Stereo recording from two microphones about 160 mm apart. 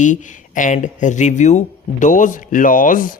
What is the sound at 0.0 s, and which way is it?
Speech, 50° left (ahead or behind).